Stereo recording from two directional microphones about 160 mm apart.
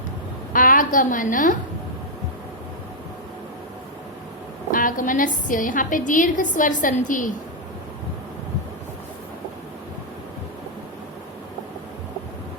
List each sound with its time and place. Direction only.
0.5 s a woman's voice: 60° left (ahead or behind)
4.7 s a woman's voice: 60° left (ahead or behind)